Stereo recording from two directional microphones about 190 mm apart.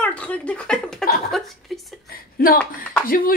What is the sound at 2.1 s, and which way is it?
Speech, 50° left (ahead or behind).